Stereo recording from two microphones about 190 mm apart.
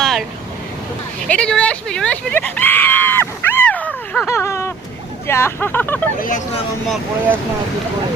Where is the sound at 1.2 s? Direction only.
5° left (ahead or behind).